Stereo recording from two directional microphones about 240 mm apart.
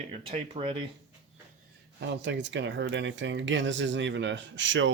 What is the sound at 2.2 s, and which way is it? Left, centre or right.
Speech, right.